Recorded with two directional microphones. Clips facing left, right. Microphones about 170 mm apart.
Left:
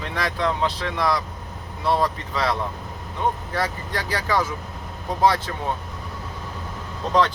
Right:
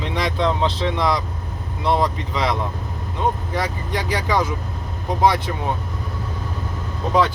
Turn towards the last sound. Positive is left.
turn(degrees=-10)  # may be behind; listen again after turning